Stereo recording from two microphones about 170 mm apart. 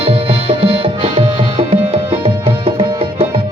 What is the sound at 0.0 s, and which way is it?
Music, 35° right (ahead or behind).